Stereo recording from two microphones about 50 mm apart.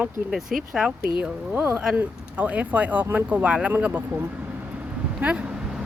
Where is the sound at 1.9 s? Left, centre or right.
Right.